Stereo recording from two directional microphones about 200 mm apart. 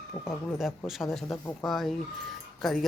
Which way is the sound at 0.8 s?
Centre (ahead or behind).